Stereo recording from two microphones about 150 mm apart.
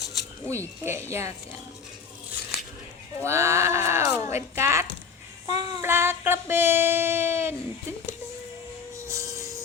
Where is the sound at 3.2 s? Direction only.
20° right (ahead or behind).